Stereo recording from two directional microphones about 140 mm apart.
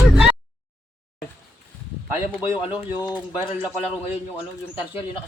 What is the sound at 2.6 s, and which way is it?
Speech, 30° left (ahead or behind).